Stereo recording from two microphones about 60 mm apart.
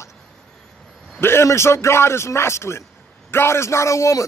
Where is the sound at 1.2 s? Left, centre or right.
Left.